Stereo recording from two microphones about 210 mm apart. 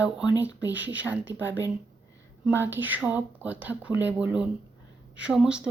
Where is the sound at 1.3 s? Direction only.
60° right (ahead or behind).